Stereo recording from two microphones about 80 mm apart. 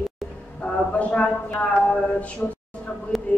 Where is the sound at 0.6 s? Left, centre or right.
Centre.